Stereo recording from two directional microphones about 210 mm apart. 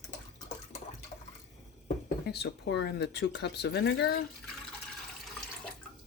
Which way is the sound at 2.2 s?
50° left (ahead or behind).